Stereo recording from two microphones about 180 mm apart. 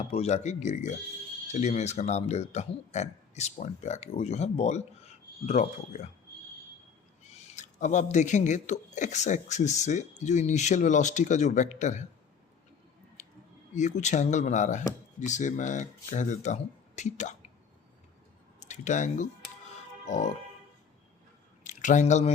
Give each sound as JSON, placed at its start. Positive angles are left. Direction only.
{"t": 0.0, "sound": "speech", "side_deg": 35}
{"t": 7.3, "sound": "speech", "side_deg": 40}
{"t": 13.2, "sound": "a sound", "side_deg": 40}
{"t": 13.7, "sound": "speech", "side_deg": 40}
{"t": 18.7, "sound": "speech", "side_deg": 40}
{"t": 21.6, "sound": "squish", "side_deg": 45}